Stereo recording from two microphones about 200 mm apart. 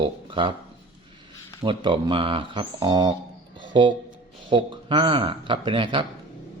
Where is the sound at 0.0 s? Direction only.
25° right (ahead or behind).